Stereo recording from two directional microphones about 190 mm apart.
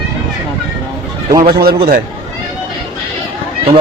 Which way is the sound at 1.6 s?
55° right (ahead or behind).